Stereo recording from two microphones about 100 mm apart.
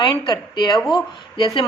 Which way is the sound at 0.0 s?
50° left (ahead or behind).